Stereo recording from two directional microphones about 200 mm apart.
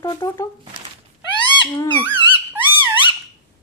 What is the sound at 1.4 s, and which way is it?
Owl, 20° left (ahead or behind).